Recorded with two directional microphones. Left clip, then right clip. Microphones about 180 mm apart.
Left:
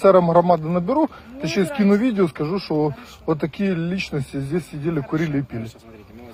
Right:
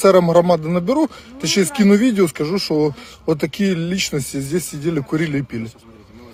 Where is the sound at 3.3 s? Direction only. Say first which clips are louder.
Right 3 dB; 55° right (ahead or behind).